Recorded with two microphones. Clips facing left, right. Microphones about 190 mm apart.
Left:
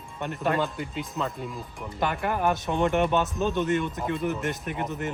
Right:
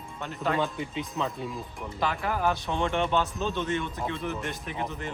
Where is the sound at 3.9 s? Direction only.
5° left (ahead or behind).